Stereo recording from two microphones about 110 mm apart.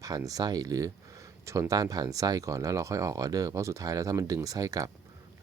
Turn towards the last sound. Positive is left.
turn(degrees=-30)  # may be behind; listen again after turning